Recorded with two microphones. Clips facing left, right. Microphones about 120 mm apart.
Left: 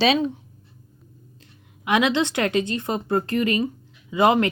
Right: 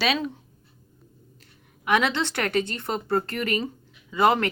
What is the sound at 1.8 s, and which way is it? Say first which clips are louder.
A woman's voice: left 3 dB; 15° left (ahead or behind).